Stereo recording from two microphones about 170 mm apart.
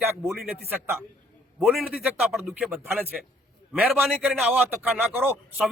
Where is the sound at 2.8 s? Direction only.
10° right (ahead or behind).